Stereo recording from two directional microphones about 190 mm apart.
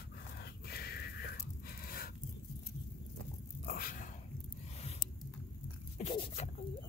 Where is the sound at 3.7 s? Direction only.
50° left (ahead or behind).